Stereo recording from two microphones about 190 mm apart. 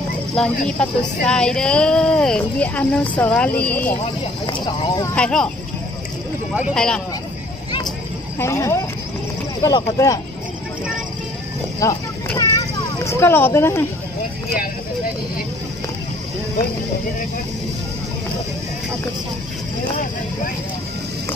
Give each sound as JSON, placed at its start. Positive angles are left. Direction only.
{"t": 0.7, "sound": "speech", "side_deg": 5}
{"t": 4.5, "sound": "speech", "side_deg": 25}
{"t": 5.1, "sound": "speech", "side_deg": 5}
{"t": 6.7, "sound": "speech", "side_deg": 5}
{"t": 8.4, "sound": "speech", "side_deg": 15}
{"t": 11.8, "sound": "speech", "side_deg": 15}
{"t": 12.4, "sound": "children playing", "side_deg": 15}